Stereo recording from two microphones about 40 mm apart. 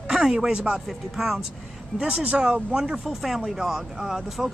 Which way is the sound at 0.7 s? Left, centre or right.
Centre.